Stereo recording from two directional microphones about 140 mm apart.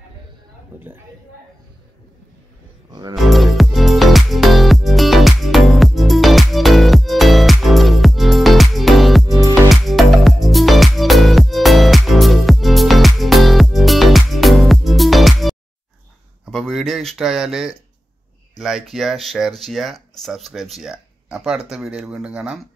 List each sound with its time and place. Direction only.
0.7 s speech: 15° right (ahead or behind)
2.9 s music: 30° right (ahead or behind)
3.2 s music: centre (ahead or behind)
9.2 s music: 25° right (ahead or behind)
9.7 s music: centre (ahead or behind)
16.4 s a sound: centre (ahead or behind)
18.6 s speech: 5° right (ahead or behind)